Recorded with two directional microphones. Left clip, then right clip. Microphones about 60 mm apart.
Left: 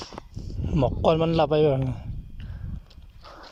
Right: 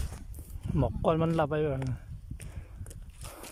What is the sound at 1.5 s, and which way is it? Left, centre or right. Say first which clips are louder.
Speech: left 10 dB; left.